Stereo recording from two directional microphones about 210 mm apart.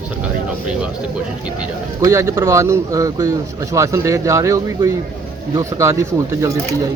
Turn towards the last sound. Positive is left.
turn(degrees=-15)  # may be behind; listen again after turning